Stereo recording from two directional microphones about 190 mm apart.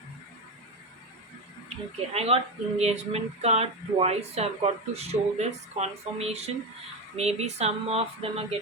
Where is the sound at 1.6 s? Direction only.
35° right (ahead or behind).